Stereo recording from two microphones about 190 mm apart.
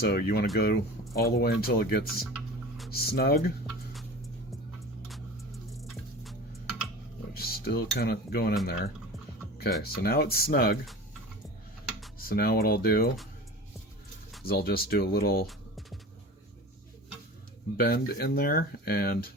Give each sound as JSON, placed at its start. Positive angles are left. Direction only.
{"t": 0.0, "sound": "speech", "side_deg": 55}
{"t": 5.0, "sound": "music", "side_deg": 0}
{"t": 7.3, "sound": "cutlery", "side_deg": 55}
{"t": 9.8, "sound": "speech", "side_deg": 55}
{"t": 12.3, "sound": "speech", "side_deg": 55}
{"t": 14.4, "sound": "speech", "side_deg": 55}
{"t": 15.4, "sound": "music", "side_deg": 0}
{"t": 17.7, "sound": "speech", "side_deg": 55}